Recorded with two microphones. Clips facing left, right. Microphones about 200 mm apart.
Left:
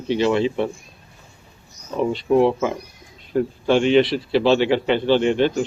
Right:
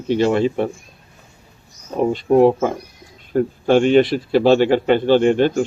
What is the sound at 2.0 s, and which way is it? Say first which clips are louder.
Speech: right 4 dB; 45° right (ahead or behind).